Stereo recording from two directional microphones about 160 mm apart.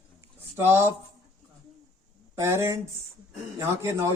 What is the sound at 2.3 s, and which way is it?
A man's voice, 15° right (ahead or behind).